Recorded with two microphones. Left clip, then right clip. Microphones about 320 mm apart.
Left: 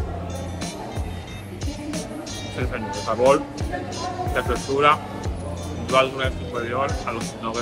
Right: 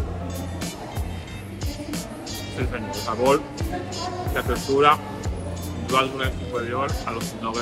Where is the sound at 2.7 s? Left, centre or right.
Centre.